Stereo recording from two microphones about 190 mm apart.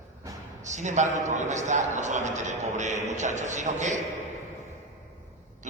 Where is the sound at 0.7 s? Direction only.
40° right (ahead or behind).